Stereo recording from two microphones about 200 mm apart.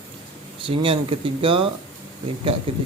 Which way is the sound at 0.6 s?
25° right (ahead or behind).